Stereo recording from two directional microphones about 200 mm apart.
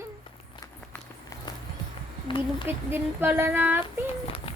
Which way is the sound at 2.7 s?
10° right (ahead or behind).